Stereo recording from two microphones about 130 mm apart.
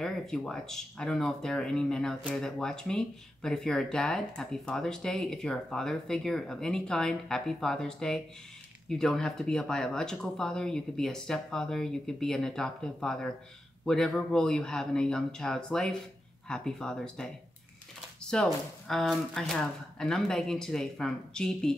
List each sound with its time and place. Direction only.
0.0 s speech: 5° left (ahead or behind)